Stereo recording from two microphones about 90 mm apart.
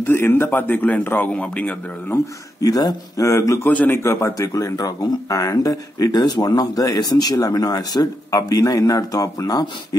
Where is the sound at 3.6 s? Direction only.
20° left (ahead or behind).